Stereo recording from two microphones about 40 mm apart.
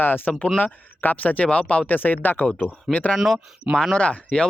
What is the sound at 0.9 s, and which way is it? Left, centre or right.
Speech, left.